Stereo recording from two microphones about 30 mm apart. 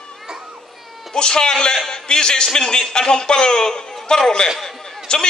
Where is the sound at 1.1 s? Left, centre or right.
Left.